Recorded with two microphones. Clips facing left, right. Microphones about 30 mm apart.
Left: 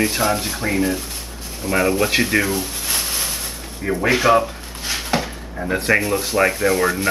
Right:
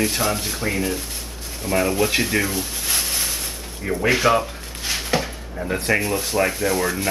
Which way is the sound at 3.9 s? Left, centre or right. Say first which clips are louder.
Left 2 dB; centre.